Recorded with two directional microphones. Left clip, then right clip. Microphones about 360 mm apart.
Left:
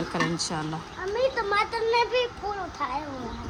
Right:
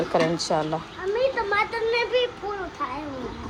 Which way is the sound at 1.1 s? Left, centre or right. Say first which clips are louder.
Right 2 dB; left.